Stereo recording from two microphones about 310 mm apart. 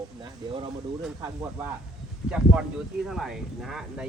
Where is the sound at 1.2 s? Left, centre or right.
Centre.